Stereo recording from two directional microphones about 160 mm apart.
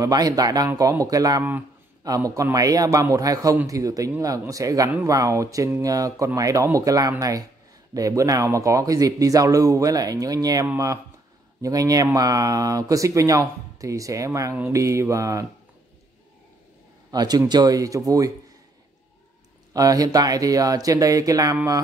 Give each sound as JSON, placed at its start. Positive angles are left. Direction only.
{"t": 0.0, "sound": "speech", "side_deg": -25}
{"t": 17.1, "sound": "speech", "side_deg": -25}
{"t": 19.7, "sound": "speech", "side_deg": -20}